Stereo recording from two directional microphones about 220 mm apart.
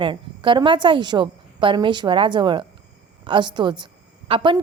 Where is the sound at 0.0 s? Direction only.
20° right (ahead or behind).